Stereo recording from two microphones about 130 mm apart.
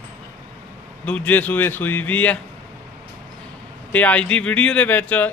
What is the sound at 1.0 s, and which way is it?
Speech, 10° left (ahead or behind).